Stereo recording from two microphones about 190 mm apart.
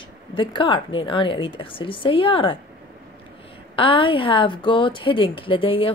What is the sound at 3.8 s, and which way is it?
A woman's voice, 25° left (ahead or behind).